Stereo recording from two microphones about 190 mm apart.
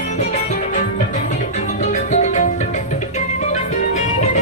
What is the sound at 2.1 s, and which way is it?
Music, 40° left (ahead or behind).